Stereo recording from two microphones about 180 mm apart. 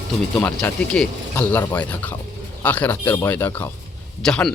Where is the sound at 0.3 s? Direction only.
5° left (ahead or behind).